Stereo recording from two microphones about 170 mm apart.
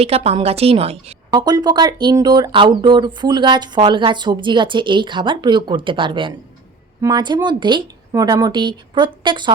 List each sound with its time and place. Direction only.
0.0 s a woman's voice: 35° right (ahead or behind)